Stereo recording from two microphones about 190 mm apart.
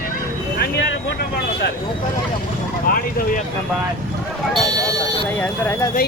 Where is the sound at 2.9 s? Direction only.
50° left (ahead or behind).